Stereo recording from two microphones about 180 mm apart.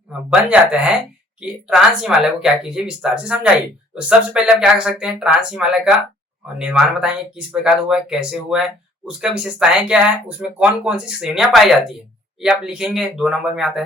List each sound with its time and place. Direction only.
0.3 s speech: 5° right (ahead or behind)